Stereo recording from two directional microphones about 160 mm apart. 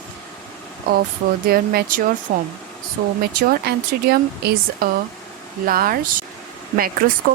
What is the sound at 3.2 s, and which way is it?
Speech, 80° right.